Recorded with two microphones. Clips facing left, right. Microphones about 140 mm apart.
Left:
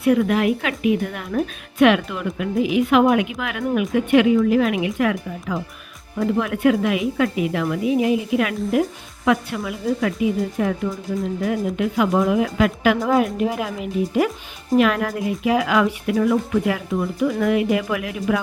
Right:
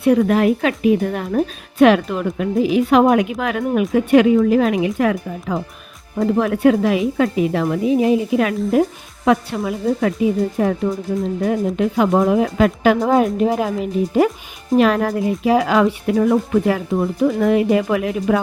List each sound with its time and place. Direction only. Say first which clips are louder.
0.0 s a woman's voice: right 3 dB; 35° right (ahead or behind)